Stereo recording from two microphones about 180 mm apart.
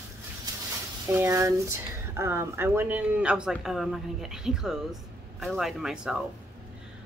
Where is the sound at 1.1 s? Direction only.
15° right (ahead or behind).